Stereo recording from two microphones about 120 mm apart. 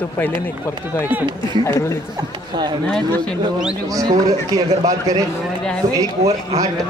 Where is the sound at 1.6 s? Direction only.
20° left (ahead or behind).